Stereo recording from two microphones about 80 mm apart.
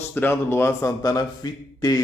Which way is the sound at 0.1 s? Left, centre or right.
Left.